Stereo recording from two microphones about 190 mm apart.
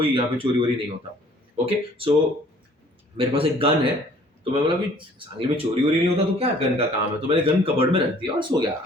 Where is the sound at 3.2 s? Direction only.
30° right (ahead or behind).